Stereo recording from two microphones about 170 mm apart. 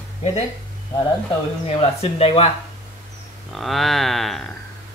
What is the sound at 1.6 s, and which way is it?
Speech, 35° left (ahead or behind).